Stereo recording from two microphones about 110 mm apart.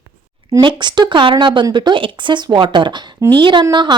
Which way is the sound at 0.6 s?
45° right (ahead or behind).